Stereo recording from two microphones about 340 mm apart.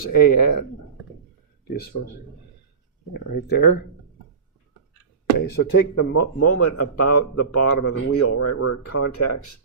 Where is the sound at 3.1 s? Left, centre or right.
Left.